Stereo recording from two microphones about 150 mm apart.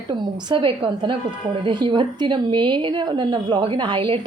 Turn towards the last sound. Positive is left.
turn(degrees=-35)  # may be behind; listen again after turning